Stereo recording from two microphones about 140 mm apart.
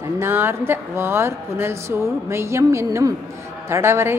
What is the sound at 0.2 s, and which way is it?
A woman's voice, 15° right (ahead or behind).